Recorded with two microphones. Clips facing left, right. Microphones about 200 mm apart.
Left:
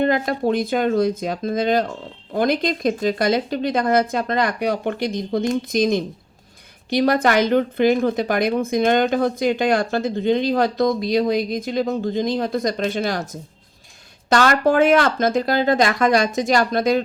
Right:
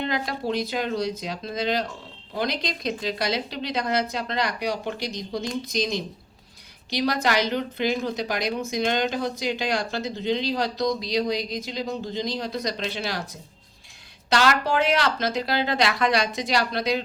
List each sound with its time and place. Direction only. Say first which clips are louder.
0.0 s speech: left 8 dB; 50° left (ahead or behind)